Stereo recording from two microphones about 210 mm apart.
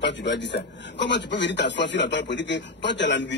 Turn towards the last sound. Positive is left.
turn(degrees=60)  # may be behind; listen again after turning